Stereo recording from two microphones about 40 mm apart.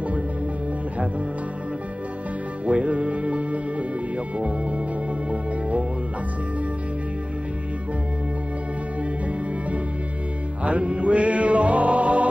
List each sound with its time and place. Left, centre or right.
2.6 s music: right
10.6 s music: right